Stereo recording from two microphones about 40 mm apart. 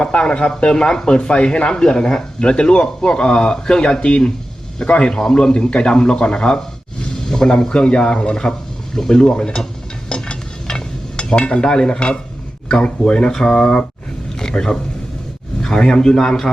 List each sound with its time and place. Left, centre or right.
0.0 s speech: left
9.0 s a man's voice: centre
10.1 s dishes: centre
12.6 s speech: left
13.3 s speech: centre
14.3 s a sound: centre
15.6 s a man's voice: centre